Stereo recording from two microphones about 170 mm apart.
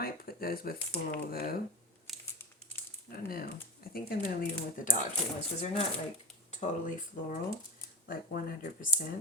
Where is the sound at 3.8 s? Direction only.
60° left (ahead or behind).